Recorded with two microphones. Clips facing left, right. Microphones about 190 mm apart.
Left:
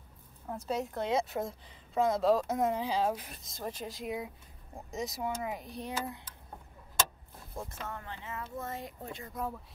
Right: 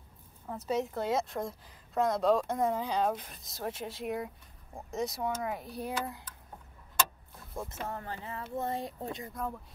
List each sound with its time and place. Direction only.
0.5 s a woman's voice: centre (ahead or behind)
7.7 s speech: 35° right (ahead or behind)